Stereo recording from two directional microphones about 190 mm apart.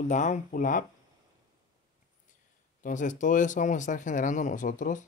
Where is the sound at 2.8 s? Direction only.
40° left (ahead or behind).